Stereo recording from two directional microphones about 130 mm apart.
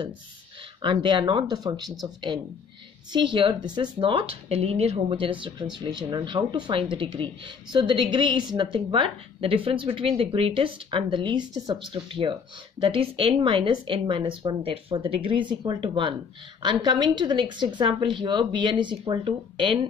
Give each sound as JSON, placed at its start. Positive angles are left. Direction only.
{"t": 0.8, "sound": "speech", "side_deg": -35}